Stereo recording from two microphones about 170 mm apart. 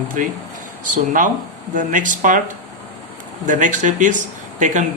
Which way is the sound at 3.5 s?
45° right (ahead or behind).